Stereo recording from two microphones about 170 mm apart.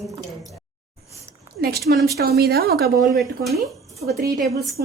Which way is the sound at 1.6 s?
70° right (ahead or behind).